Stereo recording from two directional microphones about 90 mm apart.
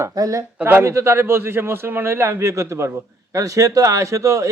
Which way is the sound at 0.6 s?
25° right (ahead or behind).